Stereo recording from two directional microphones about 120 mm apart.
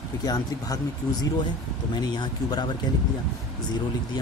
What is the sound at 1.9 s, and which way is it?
Speech, 35° left (ahead or behind).